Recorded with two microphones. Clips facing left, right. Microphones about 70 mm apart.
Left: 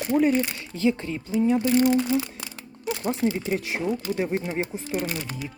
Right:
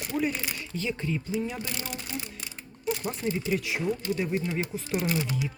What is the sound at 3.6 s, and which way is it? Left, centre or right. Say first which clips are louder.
Speech: left 2 dB; left.